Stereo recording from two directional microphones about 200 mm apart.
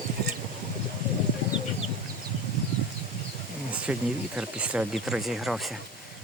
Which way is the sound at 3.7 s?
5° right (ahead or behind).